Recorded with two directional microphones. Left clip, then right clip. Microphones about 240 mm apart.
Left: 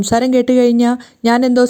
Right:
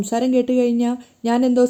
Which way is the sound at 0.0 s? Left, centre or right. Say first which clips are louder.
Left 6 dB; left.